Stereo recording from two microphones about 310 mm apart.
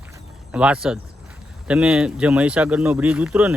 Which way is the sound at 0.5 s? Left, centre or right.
Centre.